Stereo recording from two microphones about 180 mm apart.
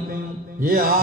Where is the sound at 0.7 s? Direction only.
55° right (ahead or behind).